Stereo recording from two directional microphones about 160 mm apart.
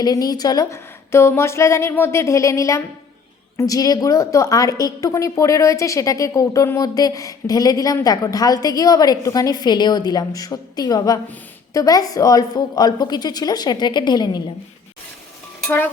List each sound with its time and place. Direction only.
0.0 s a woman's voice: 25° left (ahead or behind)